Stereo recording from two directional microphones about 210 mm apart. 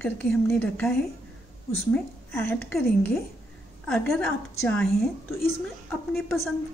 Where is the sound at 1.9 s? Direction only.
10° left (ahead or behind).